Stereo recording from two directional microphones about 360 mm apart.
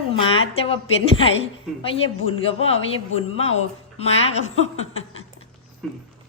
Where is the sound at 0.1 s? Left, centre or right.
Centre.